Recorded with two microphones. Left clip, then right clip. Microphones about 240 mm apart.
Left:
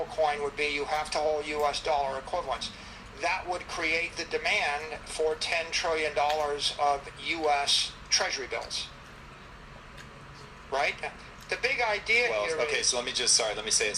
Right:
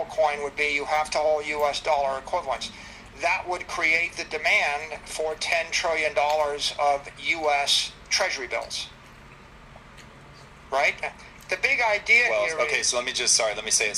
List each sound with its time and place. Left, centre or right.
0.2 s speech: right
10.7 s speech: right